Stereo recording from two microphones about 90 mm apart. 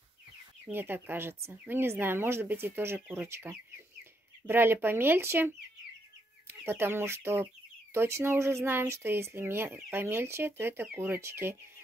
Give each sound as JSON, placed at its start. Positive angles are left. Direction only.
{"t": 0.7, "sound": "speech", "side_deg": -25}